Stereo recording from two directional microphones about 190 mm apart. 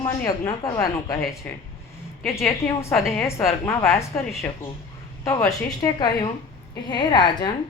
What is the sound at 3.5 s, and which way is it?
Speech, 10° left (ahead or behind).